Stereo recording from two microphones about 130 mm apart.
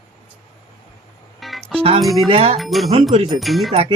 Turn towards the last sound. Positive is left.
turn(degrees=-50)  # may be behind; listen again after turning